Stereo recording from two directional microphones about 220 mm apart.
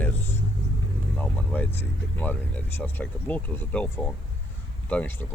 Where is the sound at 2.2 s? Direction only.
5° left (ahead or behind).